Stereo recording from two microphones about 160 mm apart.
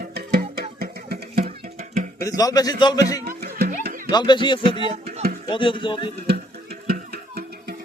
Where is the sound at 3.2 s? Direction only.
70° right (ahead or behind).